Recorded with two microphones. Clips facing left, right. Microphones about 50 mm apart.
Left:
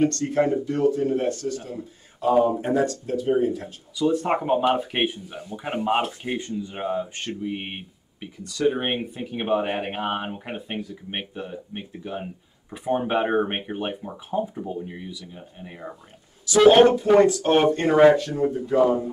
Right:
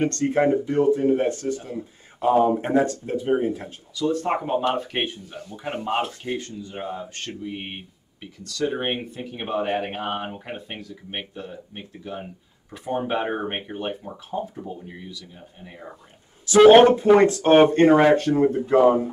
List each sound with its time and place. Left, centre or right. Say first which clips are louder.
0.0 s speech: right 1 dB; right
3.9 s speech: left 1 dB; centre
16.4 s speech: right 3 dB; right